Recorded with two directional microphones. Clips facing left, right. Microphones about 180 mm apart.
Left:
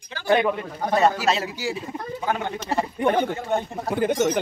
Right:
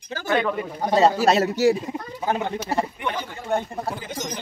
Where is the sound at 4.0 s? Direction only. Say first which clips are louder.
Left 11 dB; 60° left (ahead or behind).